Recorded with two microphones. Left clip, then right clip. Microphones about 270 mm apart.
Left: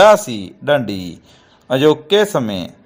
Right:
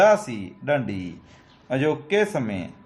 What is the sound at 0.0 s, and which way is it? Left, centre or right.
A man's voice, left.